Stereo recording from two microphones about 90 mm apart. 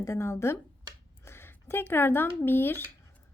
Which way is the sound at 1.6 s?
25° left (ahead or behind).